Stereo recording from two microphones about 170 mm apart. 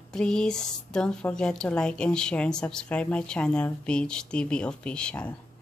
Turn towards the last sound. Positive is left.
turn(degrees=5)  # may be behind; listen again after turning